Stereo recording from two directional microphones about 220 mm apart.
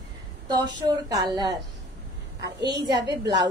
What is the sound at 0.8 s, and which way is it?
Speech, 20° right (ahead or behind).